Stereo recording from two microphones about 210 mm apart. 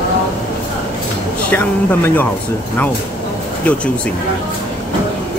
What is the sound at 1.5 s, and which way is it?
Speech, 10° left (ahead or behind).